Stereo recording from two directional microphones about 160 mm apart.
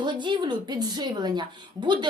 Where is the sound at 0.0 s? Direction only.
30° right (ahead or behind).